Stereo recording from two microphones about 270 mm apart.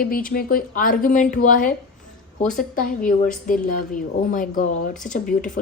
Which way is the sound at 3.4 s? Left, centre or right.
Left.